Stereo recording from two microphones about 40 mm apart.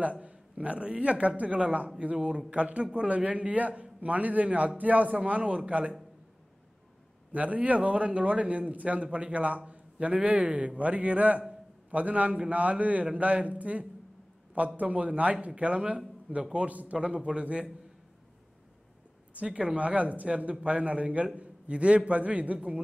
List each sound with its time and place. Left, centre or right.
0.0 s a man's voice: right
2.1 s a man's voice: right
7.3 s a man's voice: right
19.4 s a man's voice: right